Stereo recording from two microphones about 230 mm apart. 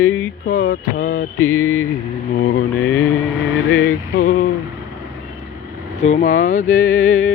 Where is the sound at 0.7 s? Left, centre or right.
Left.